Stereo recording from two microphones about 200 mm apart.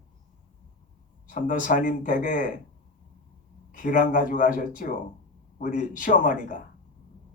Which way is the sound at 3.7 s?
40° left (ahead or behind).